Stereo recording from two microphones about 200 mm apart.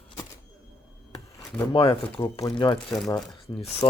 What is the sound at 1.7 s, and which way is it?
Speech, 25° left (ahead or behind).